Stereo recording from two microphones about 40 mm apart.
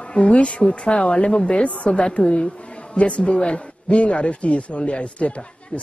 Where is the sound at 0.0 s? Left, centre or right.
Left.